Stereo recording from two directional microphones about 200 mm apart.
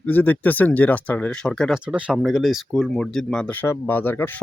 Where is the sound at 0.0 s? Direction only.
10° left (ahead or behind).